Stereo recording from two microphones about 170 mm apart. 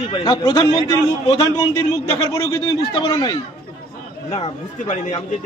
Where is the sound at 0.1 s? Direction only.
25° left (ahead or behind).